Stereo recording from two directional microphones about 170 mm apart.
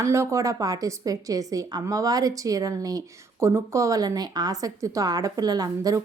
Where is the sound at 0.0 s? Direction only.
15° right (ahead or behind).